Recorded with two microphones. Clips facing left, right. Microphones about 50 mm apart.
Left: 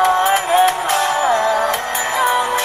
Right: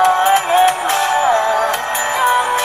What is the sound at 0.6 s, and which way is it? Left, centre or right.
Music, right.